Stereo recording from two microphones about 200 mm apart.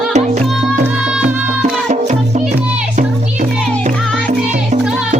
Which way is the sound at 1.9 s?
35° right (ahead or behind).